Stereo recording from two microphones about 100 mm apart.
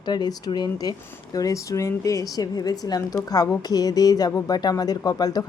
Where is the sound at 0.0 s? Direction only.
45° left (ahead or behind).